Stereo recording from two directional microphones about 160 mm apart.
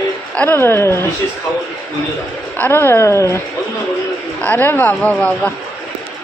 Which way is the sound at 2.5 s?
15° left (ahead or behind).